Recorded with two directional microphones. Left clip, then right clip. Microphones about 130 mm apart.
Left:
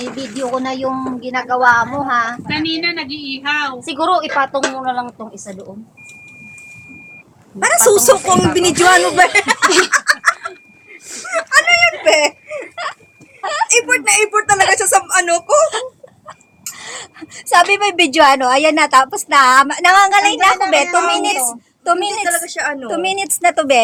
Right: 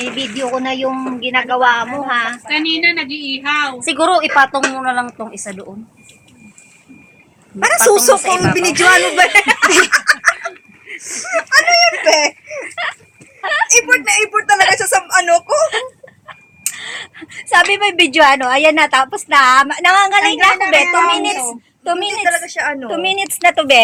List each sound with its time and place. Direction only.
0.2 s speech: centre (ahead or behind)
2.8 s a woman's voice: 50° right (ahead or behind)
4.3 s a woman's voice: 55° right (ahead or behind)
4.6 s a woman's voice: 45° right (ahead or behind)
7.9 s a woman's voice: 30° left (ahead or behind)
8.8 s a woman's voice: 10° left (ahead or behind)
9.9 s a sound: 20° left (ahead or behind)
11.2 s a woman's voice: 25° left (ahead or behind)
12.0 s a sound: 20° left (ahead or behind)
13.4 s a woman's voice: 15° left (ahead or behind); by 15.6 s 30° left (ahead or behind)
15.6 s wail: 10° left (ahead or behind)
16.7 s a woman's voice: 15° left (ahead or behind)